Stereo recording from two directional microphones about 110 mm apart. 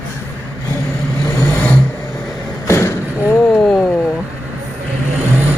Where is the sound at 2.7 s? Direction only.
25° left (ahead or behind).